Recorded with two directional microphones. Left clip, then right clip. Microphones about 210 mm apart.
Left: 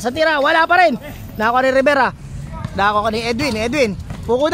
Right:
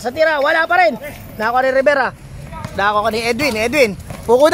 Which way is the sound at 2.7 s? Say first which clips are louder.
Right 1 dB; 15° left (ahead or behind).